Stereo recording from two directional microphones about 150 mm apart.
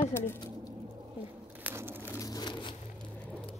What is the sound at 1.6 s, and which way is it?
Crushing, 15° right (ahead or behind).